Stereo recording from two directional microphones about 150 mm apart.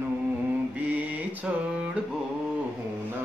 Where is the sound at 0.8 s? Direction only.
10° right (ahead or behind).